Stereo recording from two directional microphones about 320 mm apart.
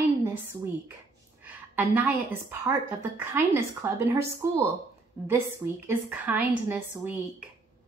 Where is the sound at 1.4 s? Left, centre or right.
Centre.